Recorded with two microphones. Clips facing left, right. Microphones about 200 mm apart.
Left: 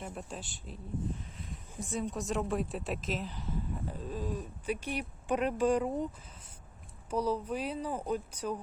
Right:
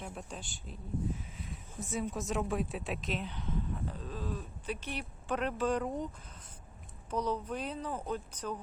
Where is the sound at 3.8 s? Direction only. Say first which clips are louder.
Left 2 dB; 15° left (ahead or behind).